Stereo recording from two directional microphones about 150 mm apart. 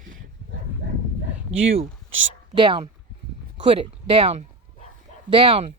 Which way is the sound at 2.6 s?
35° right (ahead or behind).